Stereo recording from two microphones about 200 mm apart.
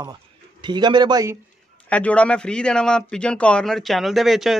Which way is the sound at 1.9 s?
5° left (ahead or behind).